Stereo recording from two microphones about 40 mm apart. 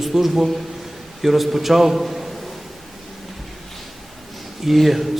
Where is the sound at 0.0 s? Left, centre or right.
Centre.